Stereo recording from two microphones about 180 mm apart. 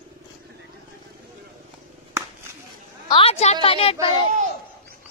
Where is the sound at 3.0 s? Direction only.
30° left (ahead or behind).